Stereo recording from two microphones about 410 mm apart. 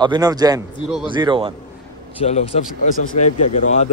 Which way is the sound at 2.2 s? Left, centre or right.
Centre.